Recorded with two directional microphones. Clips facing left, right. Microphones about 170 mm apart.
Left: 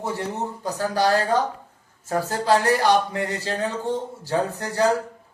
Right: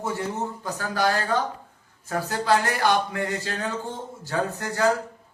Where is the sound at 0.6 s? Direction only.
35° left (ahead or behind).